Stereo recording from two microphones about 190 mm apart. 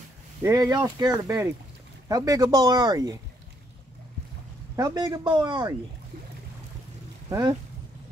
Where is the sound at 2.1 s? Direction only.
20° right (ahead or behind).